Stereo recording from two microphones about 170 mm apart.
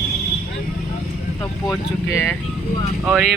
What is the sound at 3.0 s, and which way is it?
Speech, centre (ahead or behind).